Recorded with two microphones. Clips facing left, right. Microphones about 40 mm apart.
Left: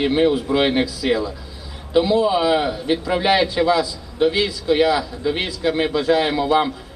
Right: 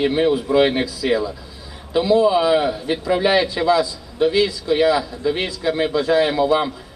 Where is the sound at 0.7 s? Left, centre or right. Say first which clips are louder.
Left 1 dB; left.